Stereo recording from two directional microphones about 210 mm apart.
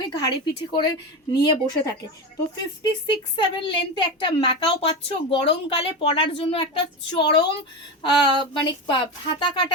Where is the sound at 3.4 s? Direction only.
25° left (ahead or behind).